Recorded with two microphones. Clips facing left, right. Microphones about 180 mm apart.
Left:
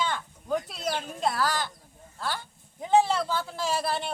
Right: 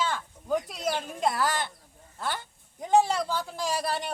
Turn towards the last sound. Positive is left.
turn(degrees=-10)  # may be behind; listen again after turning